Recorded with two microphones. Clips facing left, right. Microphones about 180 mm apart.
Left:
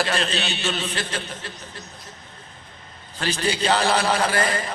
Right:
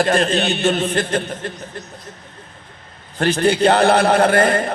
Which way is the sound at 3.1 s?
55° right (ahead or behind).